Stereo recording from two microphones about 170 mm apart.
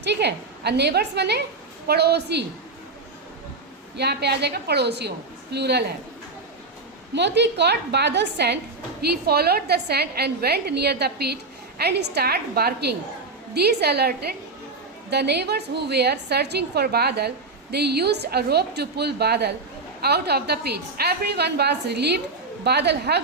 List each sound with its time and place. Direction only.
0.0 s a woman's voice: 85° right
3.9 s a woman's voice: 75° right (ahead or behind)
7.1 s a woman's voice: 90° right
9.0 s a woman's voice: 70° right (ahead or behind)